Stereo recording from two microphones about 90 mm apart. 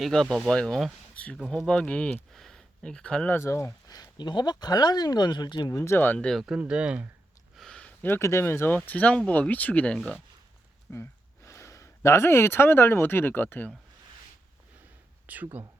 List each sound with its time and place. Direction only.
0.0 s speech: 5° left (ahead or behind)
2.3 s speech: 5° left (ahead or behind)
3.2 s speech: 30° left (ahead or behind)
3.8 s speech: 45° left (ahead or behind)
5.7 s speech: 30° left (ahead or behind)
6.1 s speech: 5° left (ahead or behind)
6.4 s speech: 10° right (ahead or behind)
7.5 s a sound: 5° left (ahead or behind)
8.0 s speech: 30° left (ahead or behind)
10.9 s speech: 30° left (ahead or behind)
15.3 s speech: 20° right (ahead or behind)